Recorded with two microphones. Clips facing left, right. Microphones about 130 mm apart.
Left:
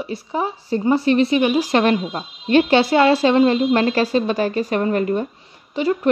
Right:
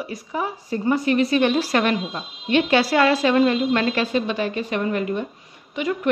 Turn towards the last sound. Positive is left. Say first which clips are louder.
# left 4 dB
turn(degrees=30)  # may be behind; listen again after turning